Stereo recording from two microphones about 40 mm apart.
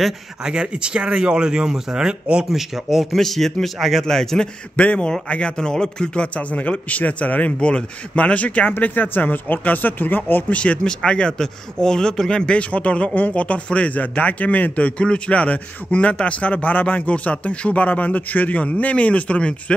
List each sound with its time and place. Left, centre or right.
0.4 s speech: right
2.5 s a man's voice: centre
4.0 s a man's voice: centre
4.7 s a man's voice: left
6.2 s a man's voice: left
8.7 s speech: left
10.5 s a man's voice: left
16.6 s a man's voice: left